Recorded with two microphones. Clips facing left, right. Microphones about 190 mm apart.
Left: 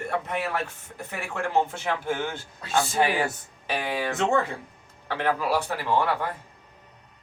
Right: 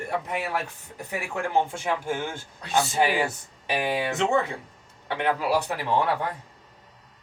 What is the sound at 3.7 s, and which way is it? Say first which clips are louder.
Speech: right 2 dB; 20° right (ahead or behind).